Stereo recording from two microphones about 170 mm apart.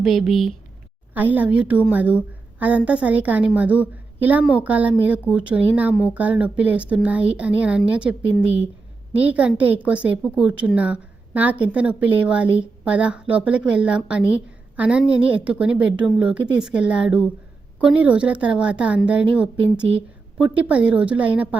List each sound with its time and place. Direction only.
0.0 s a woman's voice: centre (ahead or behind)
9.2 s a woman's voice: 10° right (ahead or behind)